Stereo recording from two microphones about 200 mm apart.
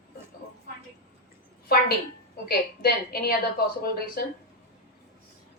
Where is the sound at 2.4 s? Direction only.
50° left (ahead or behind).